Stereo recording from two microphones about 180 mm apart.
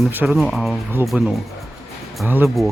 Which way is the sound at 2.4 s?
Centre (ahead or behind).